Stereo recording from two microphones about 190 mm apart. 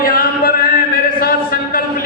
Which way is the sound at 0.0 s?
50° left (ahead or behind).